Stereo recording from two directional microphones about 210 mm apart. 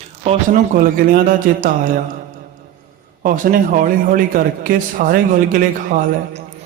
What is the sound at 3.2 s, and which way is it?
A man's voice, 40° right (ahead or behind).